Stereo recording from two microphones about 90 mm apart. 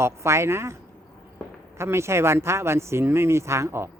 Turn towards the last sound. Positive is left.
turn(degrees=-30)  # may be behind; listen again after turning